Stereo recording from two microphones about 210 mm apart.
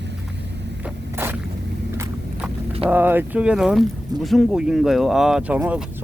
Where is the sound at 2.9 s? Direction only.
10° right (ahead or behind).